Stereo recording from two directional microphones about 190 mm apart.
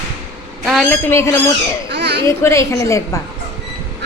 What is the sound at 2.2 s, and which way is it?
Speech, 15° left (ahead or behind).